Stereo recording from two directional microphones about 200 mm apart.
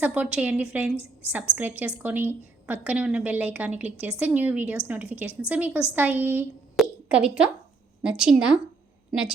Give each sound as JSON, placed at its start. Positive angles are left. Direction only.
{"t": 0.0, "sound": "a woman's voice", "side_deg": -5}